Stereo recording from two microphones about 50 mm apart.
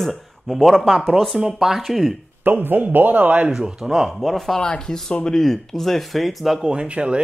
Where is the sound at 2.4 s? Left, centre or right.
Right.